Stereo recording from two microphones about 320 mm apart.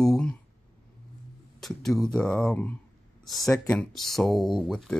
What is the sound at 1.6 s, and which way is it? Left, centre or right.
Speech, centre.